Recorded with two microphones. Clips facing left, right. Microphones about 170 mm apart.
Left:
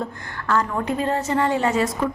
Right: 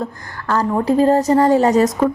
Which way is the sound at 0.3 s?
35° right (ahead or behind).